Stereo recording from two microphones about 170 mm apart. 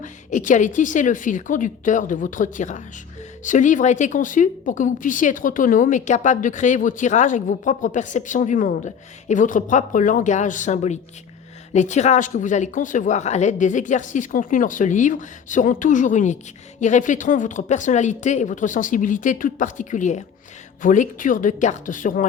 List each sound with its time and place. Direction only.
0.0 s a woman's voice: 50° left (ahead or behind)